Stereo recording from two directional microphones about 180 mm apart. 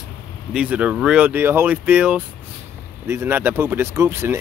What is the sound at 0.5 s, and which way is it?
Speech, 5° right (ahead or behind).